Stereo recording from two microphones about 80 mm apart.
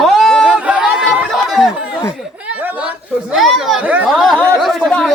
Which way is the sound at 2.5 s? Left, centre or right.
Centre.